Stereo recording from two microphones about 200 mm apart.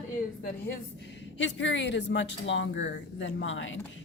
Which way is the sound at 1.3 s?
65° left (ahead or behind).